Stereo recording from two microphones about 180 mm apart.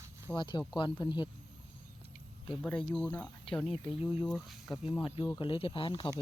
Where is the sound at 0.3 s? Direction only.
25° left (ahead or behind).